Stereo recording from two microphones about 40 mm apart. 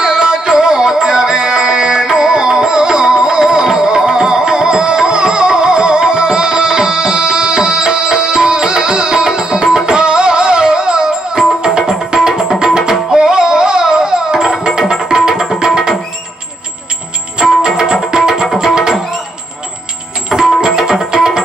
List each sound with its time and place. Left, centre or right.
0.0 s music: centre
14.8 s tabla: centre
15.6 s music: centre
17.6 s music: centre
18.3 s music: centre
20.3 s music: centre